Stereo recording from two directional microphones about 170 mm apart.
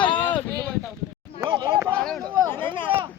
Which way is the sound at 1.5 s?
25° right (ahead or behind).